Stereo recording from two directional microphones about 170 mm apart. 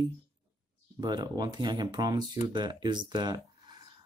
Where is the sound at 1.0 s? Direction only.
25° right (ahead or behind).